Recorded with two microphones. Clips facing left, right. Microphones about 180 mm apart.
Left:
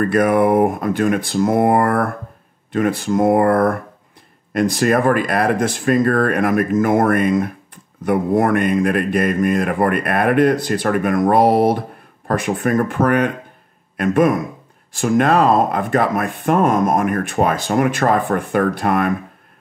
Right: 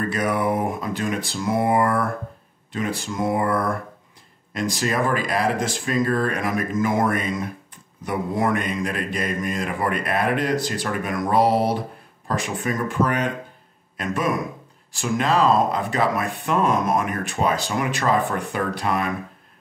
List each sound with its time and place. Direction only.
0.1 s a man's voice: 55° left (ahead or behind)